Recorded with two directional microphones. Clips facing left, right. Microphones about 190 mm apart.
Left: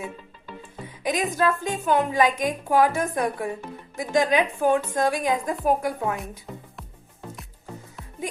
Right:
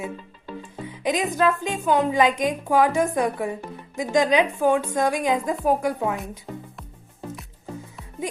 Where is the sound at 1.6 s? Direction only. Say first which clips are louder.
Right 1 dB; 15° right (ahead or behind).